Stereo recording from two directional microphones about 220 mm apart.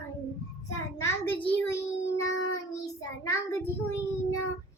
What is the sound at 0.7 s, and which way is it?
A child's voice, 15° left (ahead or behind).